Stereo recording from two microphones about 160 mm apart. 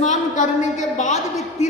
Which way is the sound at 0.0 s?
50° left (ahead or behind).